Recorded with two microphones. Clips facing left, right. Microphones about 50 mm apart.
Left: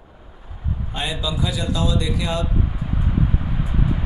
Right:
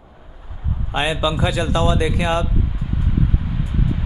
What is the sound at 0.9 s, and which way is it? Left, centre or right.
Speech, right.